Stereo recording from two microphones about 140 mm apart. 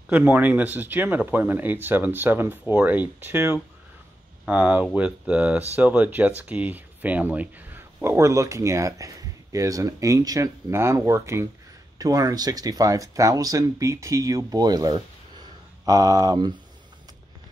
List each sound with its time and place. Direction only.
0.1 s speech: 10° right (ahead or behind); by 16.5 s 30° right (ahead or behind)